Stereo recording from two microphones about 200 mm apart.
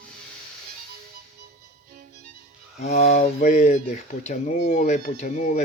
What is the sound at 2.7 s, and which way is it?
Speech, 35° left (ahead or behind).